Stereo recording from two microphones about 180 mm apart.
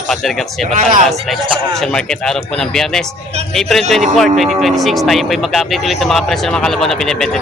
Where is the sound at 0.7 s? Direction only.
45° right (ahead or behind).